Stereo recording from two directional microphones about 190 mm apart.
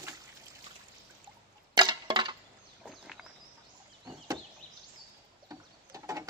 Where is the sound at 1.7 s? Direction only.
20° right (ahead or behind).